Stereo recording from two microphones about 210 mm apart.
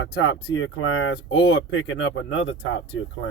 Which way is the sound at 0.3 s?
80° left.